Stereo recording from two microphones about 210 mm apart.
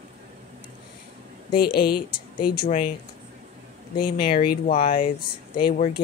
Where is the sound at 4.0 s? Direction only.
45° left (ahead or behind).